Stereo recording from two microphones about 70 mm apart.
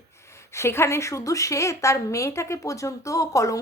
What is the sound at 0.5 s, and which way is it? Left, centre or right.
Speech, left.